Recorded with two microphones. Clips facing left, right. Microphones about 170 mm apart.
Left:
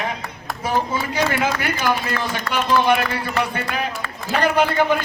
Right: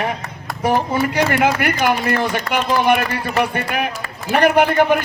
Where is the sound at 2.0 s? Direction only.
55° right (ahead or behind).